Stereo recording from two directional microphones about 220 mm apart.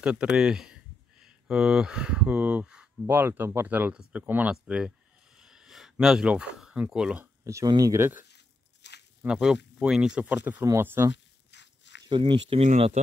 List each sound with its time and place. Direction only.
0.0 s speech: 5° right (ahead or behind)
8.2 s a sound: 50° left (ahead or behind)
9.2 s speech: 5° right (ahead or behind)
11.5 s walk: 55° left (ahead or behind)
12.1 s speech: 25° right (ahead or behind)